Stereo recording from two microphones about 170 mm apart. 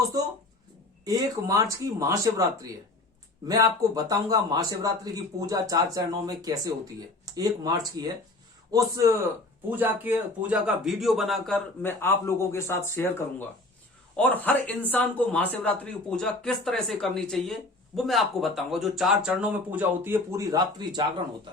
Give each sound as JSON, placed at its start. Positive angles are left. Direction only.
{"t": 1.0, "sound": "a man's voice", "side_deg": -20}
{"t": 11.8, "sound": "speech", "side_deg": 15}